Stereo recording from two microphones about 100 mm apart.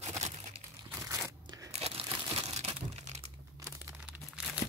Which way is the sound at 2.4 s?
90° right.